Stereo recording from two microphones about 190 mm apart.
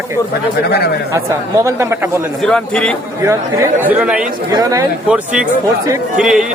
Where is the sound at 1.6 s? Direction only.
15° right (ahead or behind).